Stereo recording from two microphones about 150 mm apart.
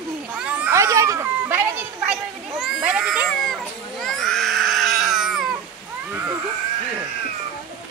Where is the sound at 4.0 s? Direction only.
5° left (ahead or behind).